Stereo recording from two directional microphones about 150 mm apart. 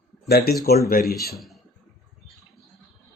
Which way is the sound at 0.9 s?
75° left (ahead or behind).